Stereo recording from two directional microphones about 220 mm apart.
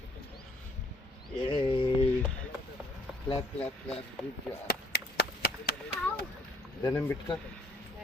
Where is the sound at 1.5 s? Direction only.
20° left (ahead or behind).